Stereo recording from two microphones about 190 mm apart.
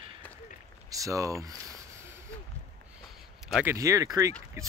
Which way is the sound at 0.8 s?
15° right (ahead or behind).